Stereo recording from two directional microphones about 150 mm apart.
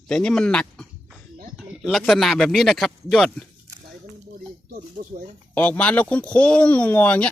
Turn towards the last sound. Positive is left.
turn(degrees=10)  # may be behind; listen again after turning